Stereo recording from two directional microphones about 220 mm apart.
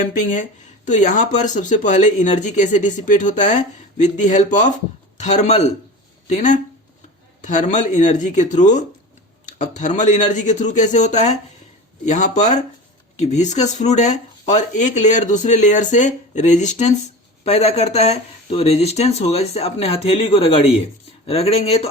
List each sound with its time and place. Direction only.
0.0 s speech: 35° left (ahead or behind)